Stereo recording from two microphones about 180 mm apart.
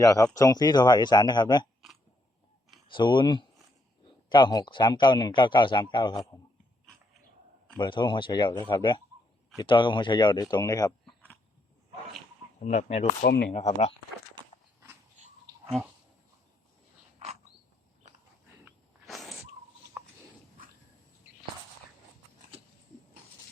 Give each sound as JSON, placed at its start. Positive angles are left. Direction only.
{"t": 0.0, "sound": "speech", "side_deg": 20}
{"t": 2.8, "sound": "speech", "side_deg": 25}
{"t": 7.8, "sound": "speech", "side_deg": 25}
{"t": 11.0, "sound": "a sound", "side_deg": 10}
{"t": 12.5, "sound": "speech", "side_deg": 40}
{"t": 13.2, "sound": "speech", "side_deg": 70}
{"t": 13.5, "sound": "speech", "side_deg": 35}
{"t": 19.0, "sound": "a sound", "side_deg": 0}